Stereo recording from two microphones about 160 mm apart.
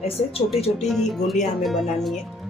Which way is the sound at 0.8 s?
Centre (ahead or behind).